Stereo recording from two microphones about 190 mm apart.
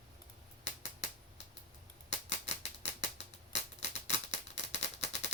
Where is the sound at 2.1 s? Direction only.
65° left (ahead or behind).